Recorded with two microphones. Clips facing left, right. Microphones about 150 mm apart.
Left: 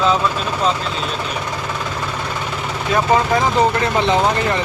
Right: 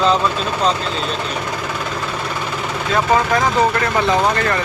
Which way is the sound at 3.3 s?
20° left (ahead or behind).